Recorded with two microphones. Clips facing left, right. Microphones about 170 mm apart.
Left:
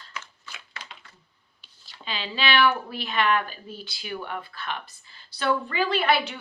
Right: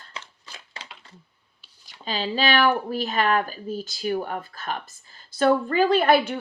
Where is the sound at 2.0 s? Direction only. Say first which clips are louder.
Right 4 dB; 40° right (ahead or behind).